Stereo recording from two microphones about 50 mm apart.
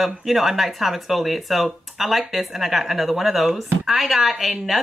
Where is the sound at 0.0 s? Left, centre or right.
Centre.